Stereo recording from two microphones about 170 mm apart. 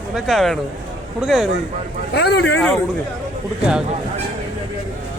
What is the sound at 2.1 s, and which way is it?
Speech, 75° left (ahead or behind).